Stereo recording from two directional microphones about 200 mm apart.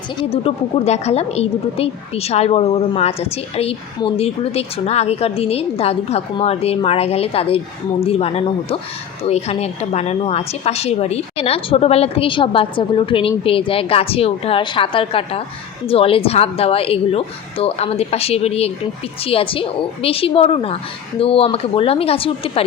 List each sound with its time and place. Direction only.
0.2 s a woman's voice: 30° left (ahead or behind)